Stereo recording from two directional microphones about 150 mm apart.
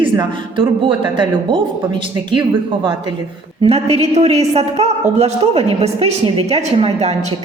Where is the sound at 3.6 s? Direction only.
40° right (ahead or behind).